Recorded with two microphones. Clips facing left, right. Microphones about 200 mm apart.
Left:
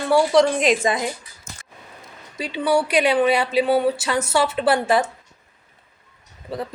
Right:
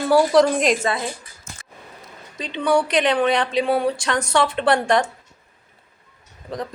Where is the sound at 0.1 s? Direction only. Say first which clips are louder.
Right 1 dB; centre (ahead or behind).